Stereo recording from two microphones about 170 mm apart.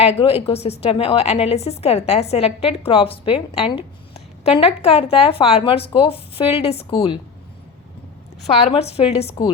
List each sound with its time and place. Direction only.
0.0 s a woman's voice: 35° left (ahead or behind)
8.6 s a woman's voice: 35° left (ahead or behind)